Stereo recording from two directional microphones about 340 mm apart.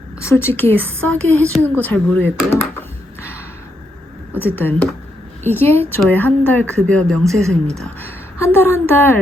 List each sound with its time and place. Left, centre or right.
0.2 s a woman's voice: centre
4.5 s a woman's voice: centre
8.4 s a woman's voice: centre